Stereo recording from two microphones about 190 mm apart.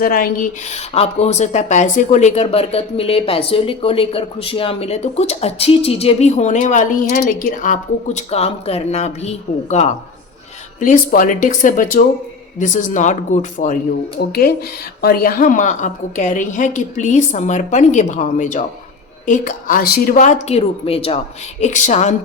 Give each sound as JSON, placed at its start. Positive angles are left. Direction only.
{"t": 0.0, "sound": "speech", "side_deg": 50}
{"t": 15.0, "sound": "speech", "side_deg": 50}